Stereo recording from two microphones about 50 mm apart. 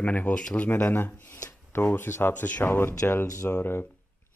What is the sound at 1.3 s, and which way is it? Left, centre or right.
Shuffling cards, left.